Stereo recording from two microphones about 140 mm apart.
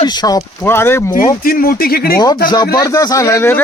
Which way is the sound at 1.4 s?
90° left.